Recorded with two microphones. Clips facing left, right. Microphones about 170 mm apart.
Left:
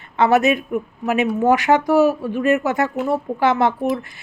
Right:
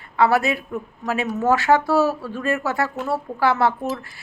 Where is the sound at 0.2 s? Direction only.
20° left (ahead or behind).